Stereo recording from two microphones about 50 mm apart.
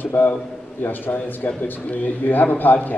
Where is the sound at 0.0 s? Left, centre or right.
Left.